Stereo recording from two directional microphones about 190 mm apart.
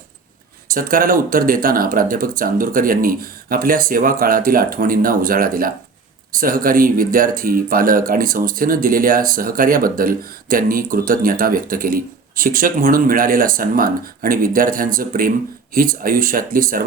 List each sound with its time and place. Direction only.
0.7 s speech: 45° right (ahead or behind)